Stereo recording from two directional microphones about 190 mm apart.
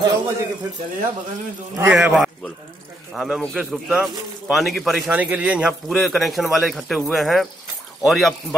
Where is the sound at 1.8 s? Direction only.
5° right (ahead or behind).